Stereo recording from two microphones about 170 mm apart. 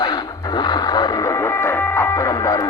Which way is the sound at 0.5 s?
25° left (ahead or behind).